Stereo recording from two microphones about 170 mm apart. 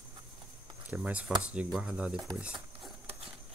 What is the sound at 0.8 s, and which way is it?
Speech, 10° right (ahead or behind).